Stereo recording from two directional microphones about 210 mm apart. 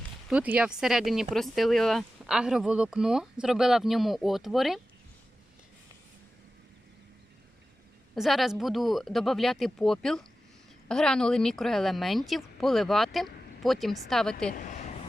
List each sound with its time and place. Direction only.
0.3 s speech: 5° right (ahead or behind)
8.1 s speech: centre (ahead or behind)
14.5 s a sound: 35° left (ahead or behind)